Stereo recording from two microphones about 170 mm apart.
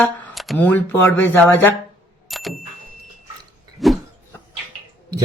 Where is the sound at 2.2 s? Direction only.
Centre (ahead or behind).